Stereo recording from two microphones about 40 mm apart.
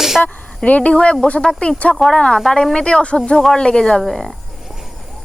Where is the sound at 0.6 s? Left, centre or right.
Left.